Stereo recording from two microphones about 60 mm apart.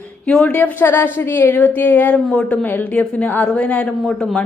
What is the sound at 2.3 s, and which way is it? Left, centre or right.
A woman's voice, centre.